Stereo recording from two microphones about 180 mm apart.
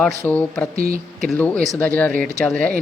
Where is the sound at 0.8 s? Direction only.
55° right (ahead or behind).